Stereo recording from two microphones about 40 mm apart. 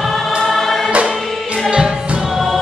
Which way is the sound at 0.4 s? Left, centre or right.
Centre.